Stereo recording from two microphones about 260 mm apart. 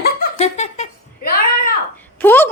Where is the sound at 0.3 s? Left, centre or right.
Left.